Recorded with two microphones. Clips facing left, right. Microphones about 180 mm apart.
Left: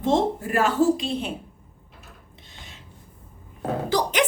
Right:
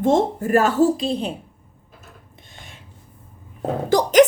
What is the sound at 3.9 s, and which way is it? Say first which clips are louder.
Speech: right 10 dB; 45° right (ahead or behind).